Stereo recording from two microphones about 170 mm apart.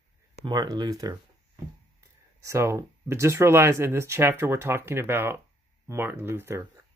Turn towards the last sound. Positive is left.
turn(degrees=-15)  # may be behind; listen again after turning